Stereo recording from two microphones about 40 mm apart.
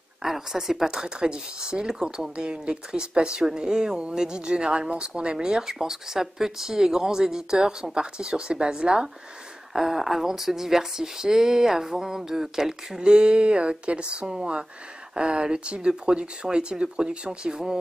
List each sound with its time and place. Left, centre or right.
0.2 s speech: centre
9.8 s speech: centre
13.0 s speech: right
14.2 s speech: centre